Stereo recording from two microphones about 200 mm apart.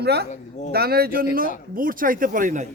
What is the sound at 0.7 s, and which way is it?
Speech, 50° right (ahead or behind).